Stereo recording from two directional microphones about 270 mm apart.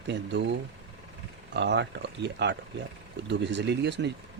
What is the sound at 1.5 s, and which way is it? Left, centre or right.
Speech, right.